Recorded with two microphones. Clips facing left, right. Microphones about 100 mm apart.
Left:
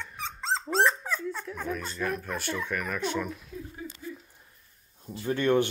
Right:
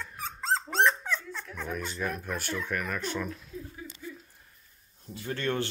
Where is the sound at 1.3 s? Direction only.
10° left (ahead or behind).